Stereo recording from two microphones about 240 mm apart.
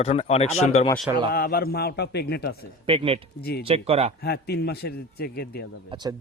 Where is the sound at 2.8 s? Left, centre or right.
Right.